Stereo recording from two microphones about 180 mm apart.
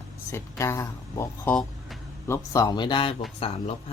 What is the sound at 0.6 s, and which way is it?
Speech, 15° left (ahead or behind).